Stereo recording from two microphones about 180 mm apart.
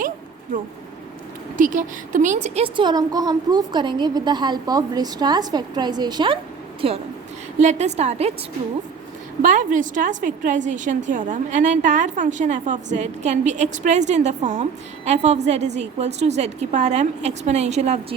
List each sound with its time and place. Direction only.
1.5 s a woman's voice: 45° right (ahead or behind)
9.4 s a woman's voice: 45° right (ahead or behind)